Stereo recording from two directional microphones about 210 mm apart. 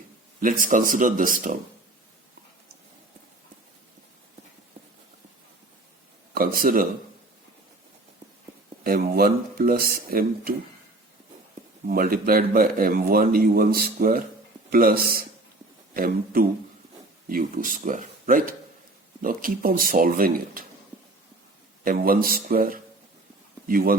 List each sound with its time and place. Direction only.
0.4 s speech: 40° right (ahead or behind)
6.3 s speech: 40° right (ahead or behind)
8.8 s speech: 45° right (ahead or behind)
11.9 s speech: 45° right (ahead or behind)
21.8 s speech: 45° right (ahead or behind)